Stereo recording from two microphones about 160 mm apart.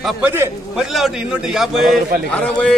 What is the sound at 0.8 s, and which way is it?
A man's voice, centre (ahead or behind).